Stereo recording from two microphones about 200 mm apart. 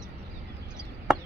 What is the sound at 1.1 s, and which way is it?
Chop, 5° right (ahead or behind).